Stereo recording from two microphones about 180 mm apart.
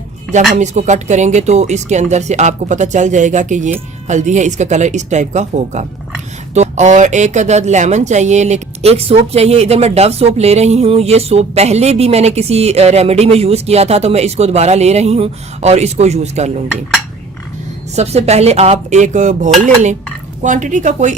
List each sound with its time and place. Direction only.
0.5 s speech: 40° right (ahead or behind)
17.9 s a woman's voice: 35° right (ahead or behind)